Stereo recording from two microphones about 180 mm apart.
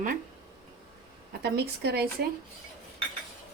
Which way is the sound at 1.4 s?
65° right (ahead or behind).